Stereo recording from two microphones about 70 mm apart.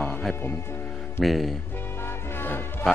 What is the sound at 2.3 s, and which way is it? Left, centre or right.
Music, left.